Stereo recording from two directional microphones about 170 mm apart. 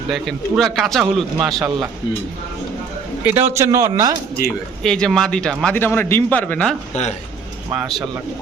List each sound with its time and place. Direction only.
0.1 s a man's voice: centre (ahead or behind)
3.2 s a man's voice: 15° right (ahead or behind)
4.4 s a man's voice: 5° left (ahead or behind)